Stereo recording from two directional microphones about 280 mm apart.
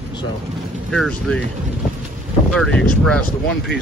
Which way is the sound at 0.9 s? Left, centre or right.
Centre.